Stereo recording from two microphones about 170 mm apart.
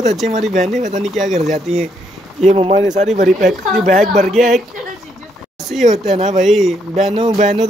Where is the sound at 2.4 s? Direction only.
40° right (ahead or behind).